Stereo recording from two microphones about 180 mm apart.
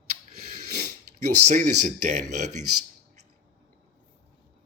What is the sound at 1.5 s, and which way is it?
Speech, 45° right (ahead or behind).